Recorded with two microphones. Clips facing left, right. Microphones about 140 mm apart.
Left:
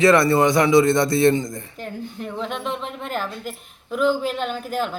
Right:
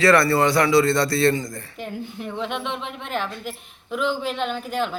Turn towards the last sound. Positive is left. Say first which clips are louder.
# even
turn(degrees=0)  # may be behind; listen again after turning